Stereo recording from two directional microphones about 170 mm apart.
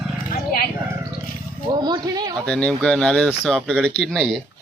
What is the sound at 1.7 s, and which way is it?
Speech, 25° right (ahead or behind).